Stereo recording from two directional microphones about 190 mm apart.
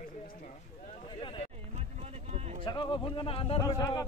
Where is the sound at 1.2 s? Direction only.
25° left (ahead or behind).